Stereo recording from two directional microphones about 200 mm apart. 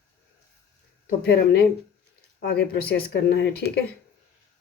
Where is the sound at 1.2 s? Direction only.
50° left (ahead or behind).